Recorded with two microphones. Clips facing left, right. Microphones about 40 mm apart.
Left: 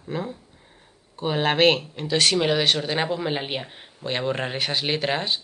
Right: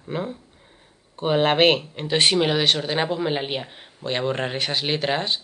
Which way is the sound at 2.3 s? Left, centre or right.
Centre.